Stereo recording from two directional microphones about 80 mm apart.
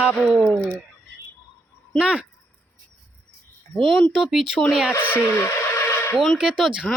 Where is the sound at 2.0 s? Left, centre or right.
Centre.